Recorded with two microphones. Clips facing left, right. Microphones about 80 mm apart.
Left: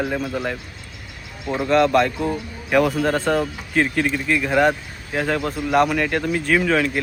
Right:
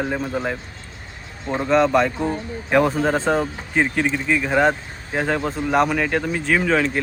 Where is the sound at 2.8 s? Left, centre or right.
Right.